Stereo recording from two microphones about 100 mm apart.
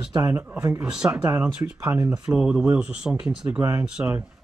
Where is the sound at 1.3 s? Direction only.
25° right (ahead or behind).